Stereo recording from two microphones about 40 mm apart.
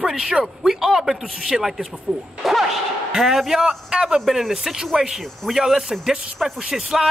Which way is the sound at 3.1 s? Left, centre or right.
Centre.